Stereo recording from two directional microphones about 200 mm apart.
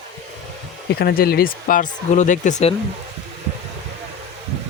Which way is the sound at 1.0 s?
50° left (ahead or behind).